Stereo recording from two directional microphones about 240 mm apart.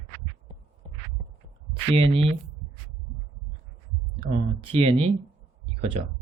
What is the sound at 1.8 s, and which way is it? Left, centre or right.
Speech, right.